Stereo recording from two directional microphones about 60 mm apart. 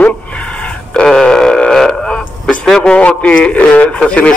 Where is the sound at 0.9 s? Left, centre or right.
Centre.